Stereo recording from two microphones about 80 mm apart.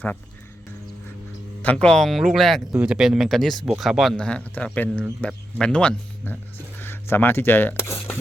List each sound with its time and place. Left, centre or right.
1.6 s speech: centre
2.7 s speech: centre
4.2 s speech: centre
6.7 s speech: left